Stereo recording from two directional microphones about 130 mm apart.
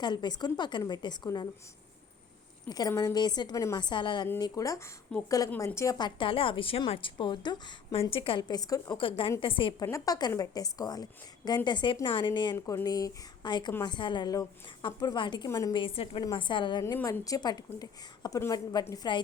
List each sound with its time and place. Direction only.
0.0 s a woman's voice: 35° left (ahead or behind)
2.6 s a woman's voice: 30° left (ahead or behind)
5.1 s a woman's voice: 10° left (ahead or behind)
5.5 s a woman's voice: 20° left (ahead or behind)
8.1 s a woman's voice: 45° left (ahead or behind)
9.0 s a woman's voice: 45° left (ahead or behind)
9.8 s a woman's voice: 25° left (ahead or behind)
12.5 s a woman's voice: 25° left (ahead or behind)
15.7 s a woman's voice: 45° left (ahead or behind)
17.0 s a woman's voice: 25° left (ahead or behind)